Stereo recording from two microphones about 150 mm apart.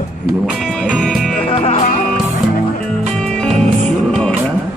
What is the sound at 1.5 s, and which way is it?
Music, 45° left (ahead or behind).